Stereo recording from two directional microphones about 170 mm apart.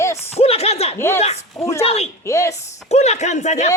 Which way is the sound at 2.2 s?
15° left (ahead or behind).